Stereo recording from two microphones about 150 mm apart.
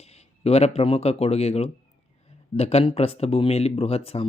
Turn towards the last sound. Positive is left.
turn(degrees=40)  # may be behind; listen again after turning